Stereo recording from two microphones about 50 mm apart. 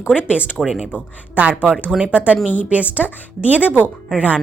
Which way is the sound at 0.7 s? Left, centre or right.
Centre.